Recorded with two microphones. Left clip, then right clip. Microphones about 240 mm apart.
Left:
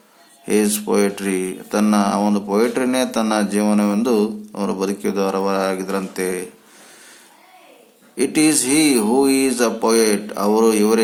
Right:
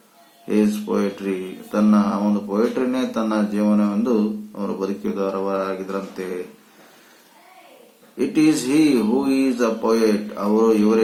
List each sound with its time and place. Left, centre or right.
0.4 s speech: left
8.1 s speech: left